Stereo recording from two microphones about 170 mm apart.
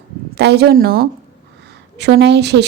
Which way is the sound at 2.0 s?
85° right.